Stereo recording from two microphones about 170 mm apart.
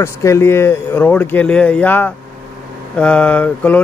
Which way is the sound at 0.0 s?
15° left (ahead or behind).